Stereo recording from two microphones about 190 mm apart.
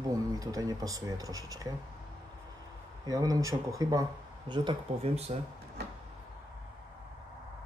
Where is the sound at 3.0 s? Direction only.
20° right (ahead or behind).